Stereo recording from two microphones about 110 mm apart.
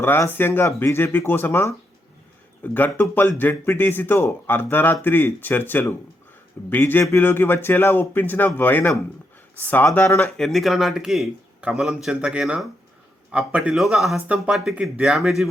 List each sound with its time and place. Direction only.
0.0 s a man's voice: 20° left (ahead or behind)
2.7 s a man's voice: 15° left (ahead or behind)
10.2 s speech: 5° left (ahead or behind)